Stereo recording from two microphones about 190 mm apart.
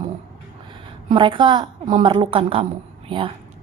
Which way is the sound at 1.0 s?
25° right (ahead or behind).